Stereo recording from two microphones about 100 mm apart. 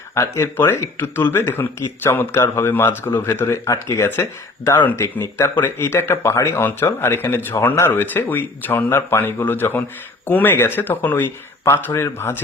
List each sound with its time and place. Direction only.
0.1 s speech: 25° left (ahead or behind)